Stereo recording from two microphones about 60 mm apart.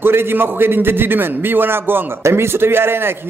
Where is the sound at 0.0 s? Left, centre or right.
Right.